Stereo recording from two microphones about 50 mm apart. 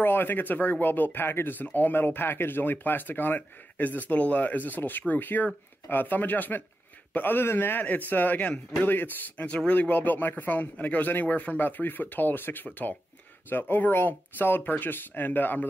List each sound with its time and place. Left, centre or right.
0.0 s a man's voice: left
7.8 s speech: left
9.5 s speech: left